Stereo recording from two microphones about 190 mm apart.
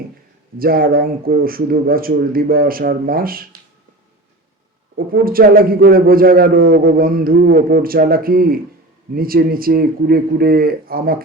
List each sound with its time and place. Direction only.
0.6 s a man's voice: 50° right (ahead or behind)
5.1 s a man's voice: 50° right (ahead or behind)